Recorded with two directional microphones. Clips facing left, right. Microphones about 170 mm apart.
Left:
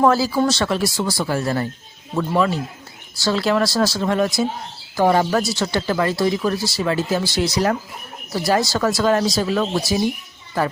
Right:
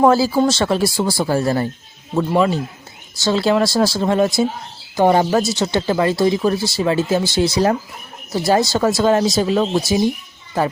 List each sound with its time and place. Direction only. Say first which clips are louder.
0.0 s speech: right 3 dB; 25° right (ahead or behind)